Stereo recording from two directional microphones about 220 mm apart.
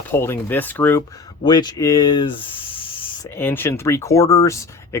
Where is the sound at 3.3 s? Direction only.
10° left (ahead or behind).